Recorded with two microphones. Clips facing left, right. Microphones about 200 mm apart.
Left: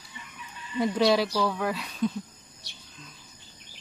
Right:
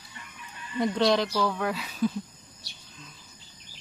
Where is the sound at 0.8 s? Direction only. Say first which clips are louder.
Left 1 dB; 5° left (ahead or behind).